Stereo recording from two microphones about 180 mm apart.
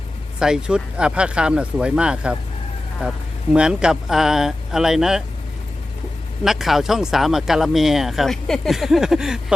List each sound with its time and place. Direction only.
0.3 s speech: 5° right (ahead or behind)
3.5 s speech: 5° right (ahead or behind)
6.4 s speech: centre (ahead or behind)